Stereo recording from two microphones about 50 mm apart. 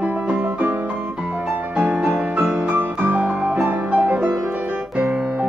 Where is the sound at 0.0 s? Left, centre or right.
Right.